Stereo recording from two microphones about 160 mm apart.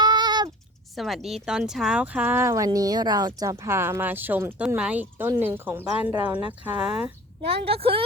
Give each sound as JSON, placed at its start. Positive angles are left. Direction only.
{"t": 0.0, "sound": "a sound", "side_deg": -25}
{"t": 0.9, "sound": "speech", "side_deg": 0}
{"t": 7.6, "sound": "speech", "side_deg": -35}